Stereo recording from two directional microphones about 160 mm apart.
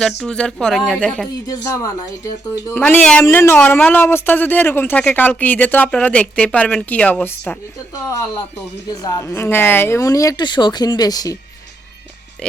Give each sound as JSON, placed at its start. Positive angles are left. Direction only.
{"t": 0.2, "sound": "speech", "side_deg": 5}
{"t": 1.6, "sound": "speech", "side_deg": 20}
{"t": 2.7, "sound": "speech", "side_deg": 5}
{"t": 9.0, "sound": "speech", "side_deg": 20}